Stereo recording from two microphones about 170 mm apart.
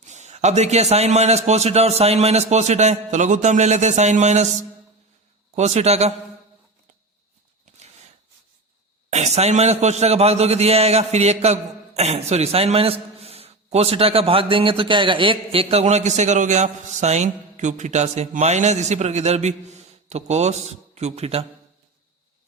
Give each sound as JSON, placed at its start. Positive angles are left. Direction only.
{"t": 0.0, "sound": "a man's voice", "side_deg": -40}
{"t": 5.5, "sound": "a man's voice", "side_deg": -40}
{"t": 9.0, "sound": "a man's voice", "side_deg": -40}